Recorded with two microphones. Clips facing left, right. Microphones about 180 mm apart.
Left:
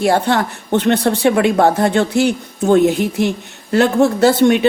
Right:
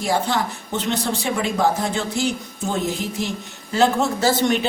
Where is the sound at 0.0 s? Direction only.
65° left (ahead or behind).